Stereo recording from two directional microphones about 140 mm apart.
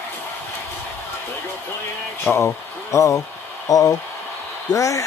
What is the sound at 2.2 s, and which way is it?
Speech, 15° left (ahead or behind).